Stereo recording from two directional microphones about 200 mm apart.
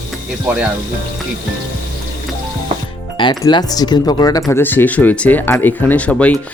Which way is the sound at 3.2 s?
20° left (ahead or behind).